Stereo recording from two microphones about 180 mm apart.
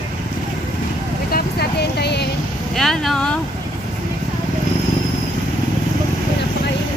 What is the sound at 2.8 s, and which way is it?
Vehicle, centre (ahead or behind).